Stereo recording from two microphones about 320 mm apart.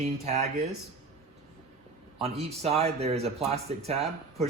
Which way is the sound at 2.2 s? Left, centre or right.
Centre.